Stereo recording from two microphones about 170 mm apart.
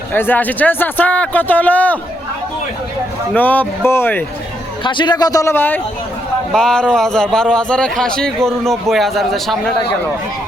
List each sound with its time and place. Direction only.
0.1 s speech: 10° left (ahead or behind)
3.3 s speech: 10° left (ahead or behind)
4.8 s a man's voice: 30° left (ahead or behind); by 9.7 s centre (ahead or behind)